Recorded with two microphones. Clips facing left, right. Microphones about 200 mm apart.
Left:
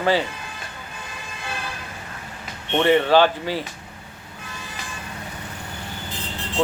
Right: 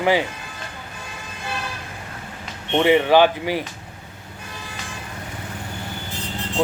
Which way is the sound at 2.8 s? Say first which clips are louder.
Right 1 dB; 10° right (ahead or behind).